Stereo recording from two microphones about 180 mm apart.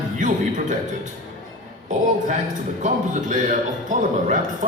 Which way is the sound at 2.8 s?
45° right (ahead or behind).